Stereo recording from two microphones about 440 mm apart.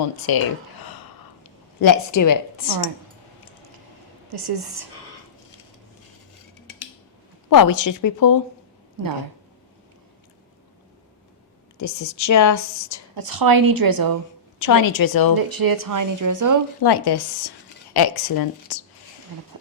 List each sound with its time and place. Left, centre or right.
0.3 s a woman's voice: left
1.8 s a woman's voice: left
4.3 s a woman's voice: right
7.5 s a woman's voice: left
11.8 s a woman's voice: left
13.1 s speech: right
14.6 s a woman's voice: left
15.4 s speech: right
16.8 s speech: left